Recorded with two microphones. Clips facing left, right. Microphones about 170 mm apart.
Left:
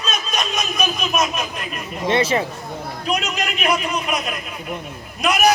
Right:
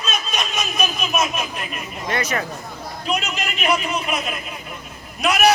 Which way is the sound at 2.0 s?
25° left (ahead or behind).